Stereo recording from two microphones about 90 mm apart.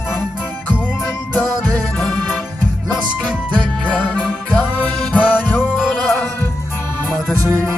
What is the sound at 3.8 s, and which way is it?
Music, 15° left (ahead or behind).